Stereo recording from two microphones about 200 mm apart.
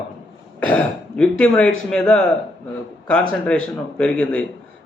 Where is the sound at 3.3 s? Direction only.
5° left (ahead or behind).